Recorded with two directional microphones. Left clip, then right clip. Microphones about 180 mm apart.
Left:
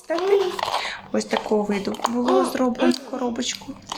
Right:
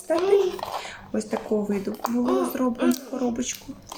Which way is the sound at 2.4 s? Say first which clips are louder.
Left 4 dB; 10° right (ahead or behind).